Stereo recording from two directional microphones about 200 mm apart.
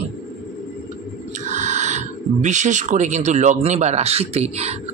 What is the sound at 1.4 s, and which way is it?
A man's voice, 35° right (ahead or behind).